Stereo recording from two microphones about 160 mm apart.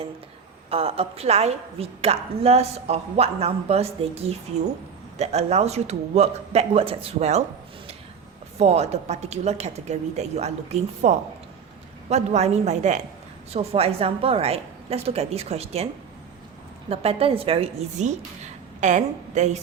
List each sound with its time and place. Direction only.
0.7 s a woman's voice: 40° right (ahead or behind)
8.5 s a woman's voice: 40° right (ahead or behind)
16.9 s a woman's voice: 40° right (ahead or behind)